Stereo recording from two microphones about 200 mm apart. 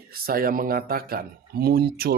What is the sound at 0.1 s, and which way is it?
Speech, 45° right (ahead or behind).